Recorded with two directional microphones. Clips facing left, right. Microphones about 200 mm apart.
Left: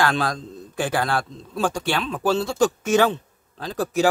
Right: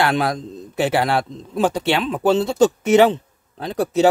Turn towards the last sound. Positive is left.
turn(degrees=-20)  # may be behind; listen again after turning